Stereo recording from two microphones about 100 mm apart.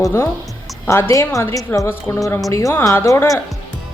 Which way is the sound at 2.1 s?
25° left (ahead or behind).